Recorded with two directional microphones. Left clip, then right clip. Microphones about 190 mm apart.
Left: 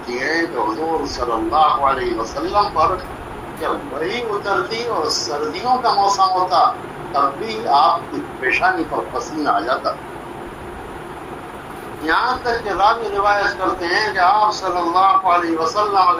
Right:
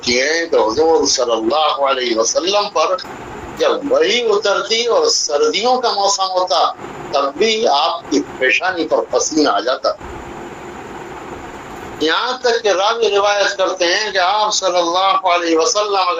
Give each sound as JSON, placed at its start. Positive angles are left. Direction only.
{"t": 0.0, "sound": "speech", "side_deg": -45}
{"t": 12.0, "sound": "speech", "side_deg": -50}